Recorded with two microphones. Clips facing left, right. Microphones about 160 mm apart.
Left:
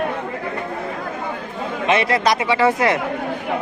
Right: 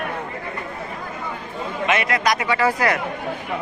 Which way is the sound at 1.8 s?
30° left (ahead or behind).